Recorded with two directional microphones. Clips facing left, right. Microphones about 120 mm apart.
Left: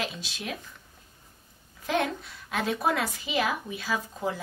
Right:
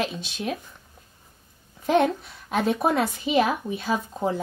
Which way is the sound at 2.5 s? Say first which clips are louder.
Right 5 dB; 25° right (ahead or behind).